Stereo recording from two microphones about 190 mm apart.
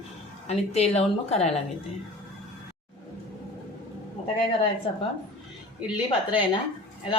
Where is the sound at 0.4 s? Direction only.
35° left (ahead or behind).